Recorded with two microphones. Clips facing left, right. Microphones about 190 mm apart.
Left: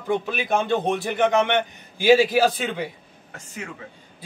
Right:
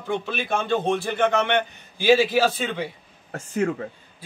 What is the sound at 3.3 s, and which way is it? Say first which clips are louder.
Speech: right 12 dB; 45° right (ahead or behind).